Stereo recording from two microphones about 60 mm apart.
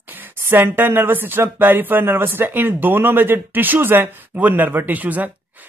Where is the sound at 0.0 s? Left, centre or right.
Right.